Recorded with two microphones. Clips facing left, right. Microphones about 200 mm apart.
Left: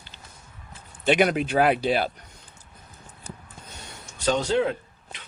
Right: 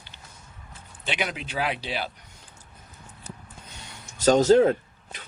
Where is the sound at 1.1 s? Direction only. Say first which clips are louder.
Left 10 dB; 50° left (ahead or behind).